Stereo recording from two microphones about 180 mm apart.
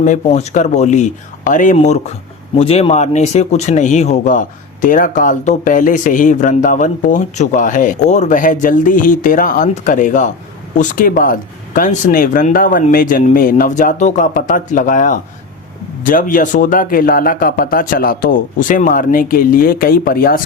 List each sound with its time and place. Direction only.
0.0 s speech: 40° left (ahead or behind)